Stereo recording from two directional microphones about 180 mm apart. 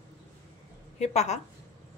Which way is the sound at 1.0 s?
40° left (ahead or behind).